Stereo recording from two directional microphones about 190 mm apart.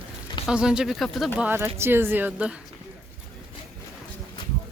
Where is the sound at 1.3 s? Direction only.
10° right (ahead or behind).